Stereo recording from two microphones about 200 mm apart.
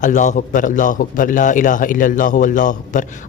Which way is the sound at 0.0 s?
40° left (ahead or behind).